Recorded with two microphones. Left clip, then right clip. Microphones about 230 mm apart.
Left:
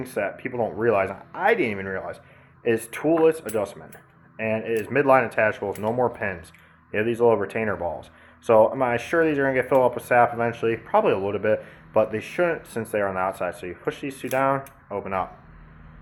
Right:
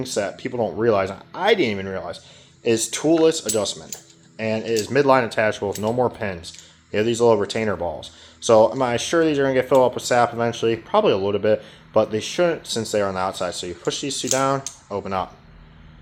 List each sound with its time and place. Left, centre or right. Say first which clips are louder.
0.0 s speech: right 3 dB; right